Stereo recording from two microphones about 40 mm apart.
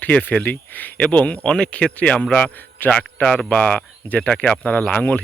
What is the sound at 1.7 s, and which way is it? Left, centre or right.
Speech, left.